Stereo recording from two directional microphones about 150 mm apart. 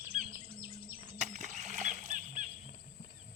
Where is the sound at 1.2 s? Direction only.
50° right (ahead or behind).